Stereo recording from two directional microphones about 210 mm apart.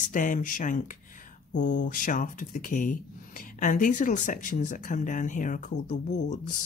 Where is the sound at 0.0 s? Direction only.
40° left (ahead or behind).